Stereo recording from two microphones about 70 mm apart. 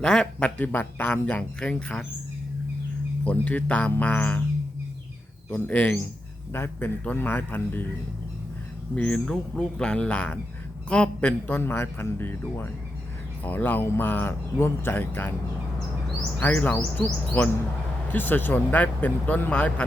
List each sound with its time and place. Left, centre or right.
0.0 s speech: centre
0.6 s a man's voice: left
3.2 s a man's voice: left
5.5 s a man's voice: centre
9.0 s a man's voice: centre
11.7 s a man's voice: left
17.0 s a man's voice: left